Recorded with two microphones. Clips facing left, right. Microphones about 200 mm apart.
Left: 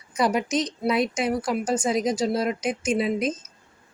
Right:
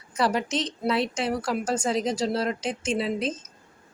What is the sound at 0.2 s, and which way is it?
Speech, 15° left (ahead or behind).